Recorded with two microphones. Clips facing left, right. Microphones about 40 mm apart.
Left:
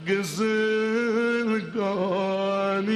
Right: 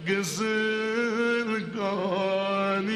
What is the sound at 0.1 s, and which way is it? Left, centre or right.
Male singing, centre.